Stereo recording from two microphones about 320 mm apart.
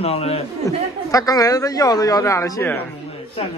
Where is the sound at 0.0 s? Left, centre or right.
Centre.